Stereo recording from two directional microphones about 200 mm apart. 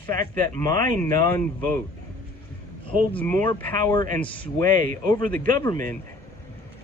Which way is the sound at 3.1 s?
10° left (ahead or behind).